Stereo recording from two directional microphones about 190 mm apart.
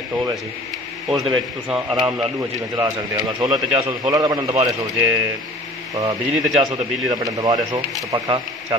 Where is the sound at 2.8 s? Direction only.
20° right (ahead or behind).